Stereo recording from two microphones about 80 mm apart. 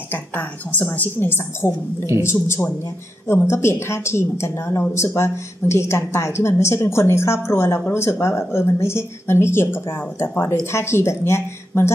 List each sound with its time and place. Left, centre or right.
0.1 s a woman's voice: centre